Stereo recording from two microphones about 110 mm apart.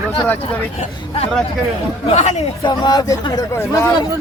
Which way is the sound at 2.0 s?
90° left.